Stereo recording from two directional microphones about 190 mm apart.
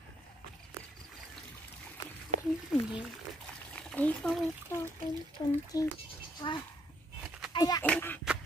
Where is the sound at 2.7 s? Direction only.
5° right (ahead or behind).